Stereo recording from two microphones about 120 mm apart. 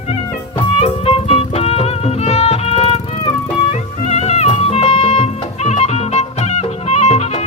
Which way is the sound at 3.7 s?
75° left (ahead or behind).